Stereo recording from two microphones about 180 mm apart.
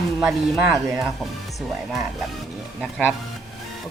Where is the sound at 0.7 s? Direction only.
15° right (ahead or behind).